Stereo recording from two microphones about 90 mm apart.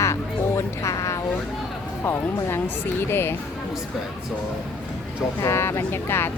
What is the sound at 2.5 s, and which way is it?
Speech, 25° left (ahead or behind).